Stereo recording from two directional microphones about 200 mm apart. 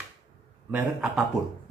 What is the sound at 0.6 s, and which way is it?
Speech, 5° right (ahead or behind).